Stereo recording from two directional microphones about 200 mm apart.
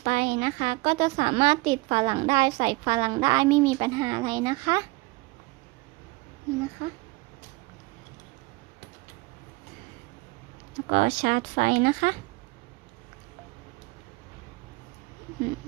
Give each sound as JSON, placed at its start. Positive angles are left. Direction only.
{"t": 0.0, "sound": "a woman's voice", "side_deg": -35}
{"t": 10.8, "sound": "speech", "side_deg": -45}